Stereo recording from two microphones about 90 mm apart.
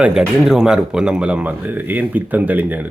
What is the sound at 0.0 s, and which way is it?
Speech, 10° right (ahead or behind).